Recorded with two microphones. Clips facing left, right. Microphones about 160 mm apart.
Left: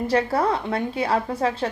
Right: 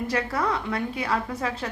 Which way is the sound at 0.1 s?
30° left (ahead or behind).